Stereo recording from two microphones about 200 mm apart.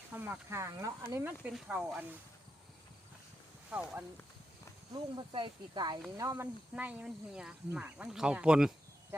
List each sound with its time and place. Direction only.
0.1 s speech: 10° right (ahead or behind)
3.7 s speech: 5° right (ahead or behind)
5.1 s speech: 25° right (ahead or behind); by 8.7 s 5° right (ahead or behind)